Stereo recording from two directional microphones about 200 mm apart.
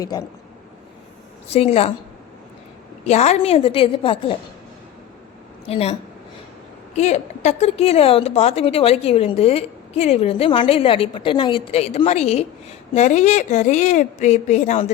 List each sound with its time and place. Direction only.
0.0 s a woman's voice: 20° left (ahead or behind)
1.5 s a woman's voice: 30° left (ahead or behind)
3.1 s a woman's voice: 35° left (ahead or behind)
5.6 s a woman's voice: 30° left (ahead or behind)